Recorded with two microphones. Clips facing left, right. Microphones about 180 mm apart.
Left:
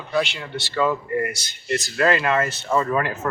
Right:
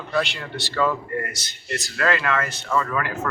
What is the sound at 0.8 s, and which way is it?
A man's voice, 15° left (ahead or behind).